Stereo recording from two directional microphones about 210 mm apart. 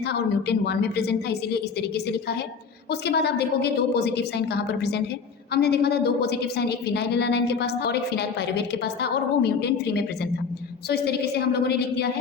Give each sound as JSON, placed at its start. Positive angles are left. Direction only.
{"t": 0.1, "sound": "a woman's voice", "side_deg": 50}
{"t": 3.1, "sound": "a woman's voice", "side_deg": 50}